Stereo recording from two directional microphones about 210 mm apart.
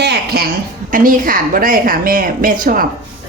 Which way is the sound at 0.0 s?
55° right (ahead or behind).